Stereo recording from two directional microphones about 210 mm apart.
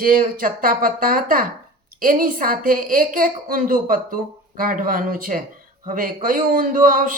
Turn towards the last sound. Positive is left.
turn(degrees=-40)  # may be behind; listen again after turning